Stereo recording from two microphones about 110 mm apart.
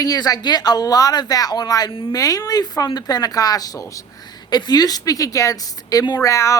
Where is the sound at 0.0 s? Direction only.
35° left (ahead or behind).